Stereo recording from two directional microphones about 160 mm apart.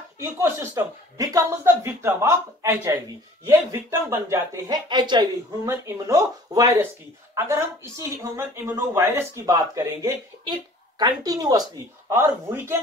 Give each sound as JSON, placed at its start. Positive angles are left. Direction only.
{"t": 0.2, "sound": "speech", "side_deg": -15}
{"t": 5.7, "sound": "speech", "side_deg": -15}